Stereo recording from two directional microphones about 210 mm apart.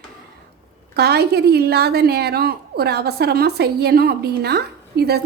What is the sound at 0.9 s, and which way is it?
A woman's voice, 50° right (ahead or behind).